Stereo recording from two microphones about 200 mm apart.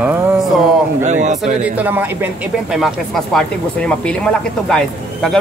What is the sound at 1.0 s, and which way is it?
Speech, 35° right (ahead or behind).